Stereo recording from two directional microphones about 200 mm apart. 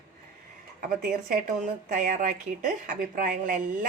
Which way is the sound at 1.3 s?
40° right (ahead or behind).